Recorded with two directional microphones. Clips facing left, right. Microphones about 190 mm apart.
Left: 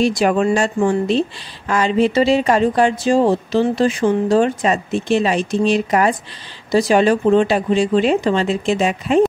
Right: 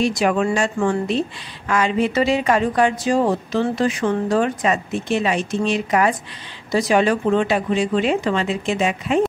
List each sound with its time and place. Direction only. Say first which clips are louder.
0.0 s speech: left 3 dB; 35° left (ahead or behind)